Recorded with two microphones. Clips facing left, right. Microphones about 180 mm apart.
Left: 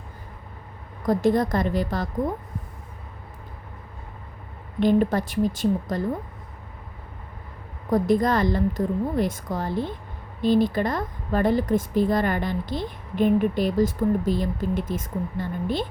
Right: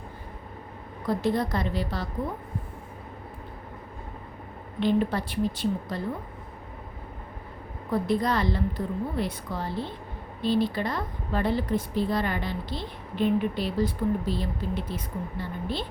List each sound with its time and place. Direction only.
1.0 s a woman's voice: 45° left (ahead or behind)
4.8 s a woman's voice: 45° left (ahead or behind)
7.9 s a woman's voice: 45° left (ahead or behind)